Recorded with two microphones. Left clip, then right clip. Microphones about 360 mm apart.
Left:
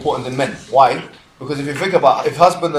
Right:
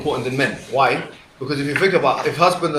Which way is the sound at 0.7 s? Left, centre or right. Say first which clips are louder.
Left 7 dB; centre.